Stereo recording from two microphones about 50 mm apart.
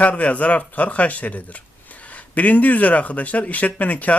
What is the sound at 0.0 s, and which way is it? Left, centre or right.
Speech, left.